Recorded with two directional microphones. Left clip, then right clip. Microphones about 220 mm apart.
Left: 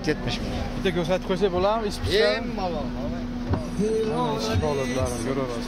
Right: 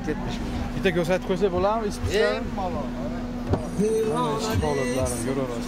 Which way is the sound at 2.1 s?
35° left (ahead or behind).